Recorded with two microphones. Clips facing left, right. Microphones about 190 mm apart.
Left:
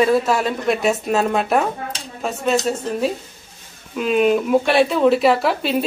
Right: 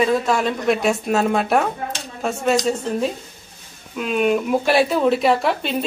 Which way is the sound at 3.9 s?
Centre (ahead or behind).